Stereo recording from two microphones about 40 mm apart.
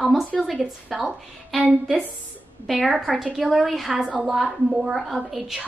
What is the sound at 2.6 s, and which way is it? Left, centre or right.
A child's voice, centre.